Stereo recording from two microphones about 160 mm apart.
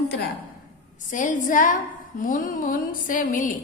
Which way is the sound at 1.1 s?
50° left (ahead or behind).